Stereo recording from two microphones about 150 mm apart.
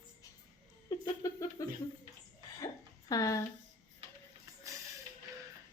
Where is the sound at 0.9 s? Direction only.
25° left (ahead or behind).